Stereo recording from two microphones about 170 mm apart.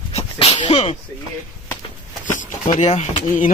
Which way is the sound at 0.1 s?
35° left (ahead or behind).